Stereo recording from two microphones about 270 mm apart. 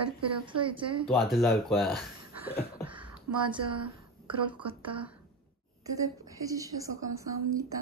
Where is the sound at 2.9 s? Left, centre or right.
Centre.